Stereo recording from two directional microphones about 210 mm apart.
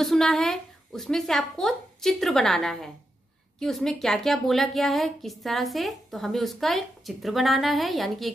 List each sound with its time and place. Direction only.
0.0 s a woman's voice: centre (ahead or behind)